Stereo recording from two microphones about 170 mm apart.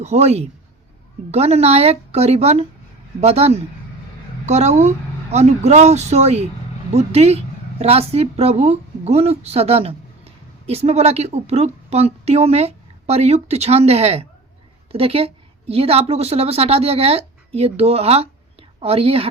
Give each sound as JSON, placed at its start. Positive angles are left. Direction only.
{"t": 0.0, "sound": "a woman's voice", "side_deg": -40}